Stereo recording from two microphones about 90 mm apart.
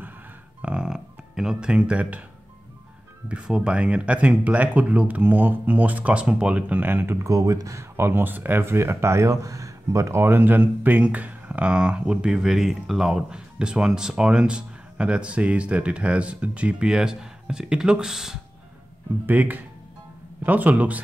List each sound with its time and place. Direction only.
0.6 s a sound: 10° right (ahead or behind)
3.3 s speech: 10° right (ahead or behind)
7.2 s speech: 40° right (ahead or behind)
7.9 s speech: 25° right (ahead or behind); by 18.4 s 5° right (ahead or behind)
19.2 s speech: 20° right (ahead or behind)